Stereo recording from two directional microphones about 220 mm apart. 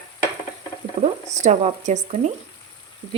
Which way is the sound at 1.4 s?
30° right (ahead or behind).